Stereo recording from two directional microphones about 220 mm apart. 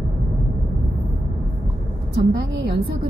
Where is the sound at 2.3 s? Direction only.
50° right (ahead or behind).